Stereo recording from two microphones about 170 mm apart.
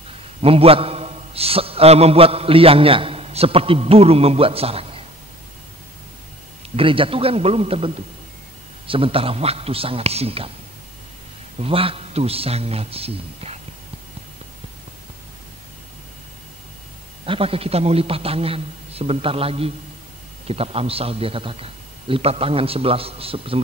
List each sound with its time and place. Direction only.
0.4 s a man's voice: 35° right (ahead or behind)
6.8 s a man's voice: 30° right (ahead or behind)
11.6 s a man's voice: 35° right (ahead or behind)
17.3 s a man's voice: 35° right (ahead or behind)